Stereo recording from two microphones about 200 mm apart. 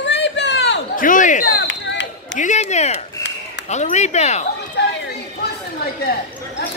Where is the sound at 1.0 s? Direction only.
40° left (ahead or behind).